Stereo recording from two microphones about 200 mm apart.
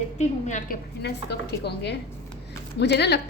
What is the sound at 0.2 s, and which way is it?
Speech, 35° left (ahead or behind).